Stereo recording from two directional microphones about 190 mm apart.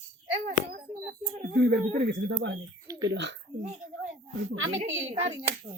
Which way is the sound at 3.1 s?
70° right (ahead or behind).